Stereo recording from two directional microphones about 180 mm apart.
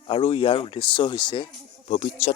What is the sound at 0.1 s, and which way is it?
Speech, 30° left (ahead or behind).